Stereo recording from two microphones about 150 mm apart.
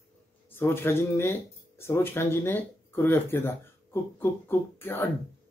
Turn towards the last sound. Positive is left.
turn(degrees=15)  # may be behind; listen again after turning